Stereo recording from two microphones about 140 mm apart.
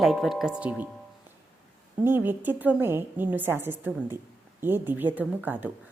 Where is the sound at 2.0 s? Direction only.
15° right (ahead or behind).